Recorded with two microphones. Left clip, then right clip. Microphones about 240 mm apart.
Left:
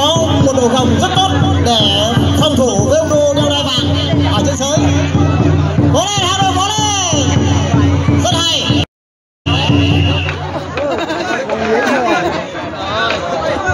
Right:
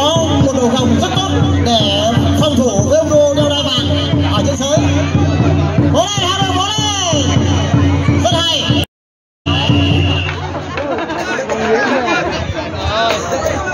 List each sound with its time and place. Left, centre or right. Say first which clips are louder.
0.0 s music: left 1 dB; left
5.9 s a sound: left 1 dB; left
8.2 s music: even; left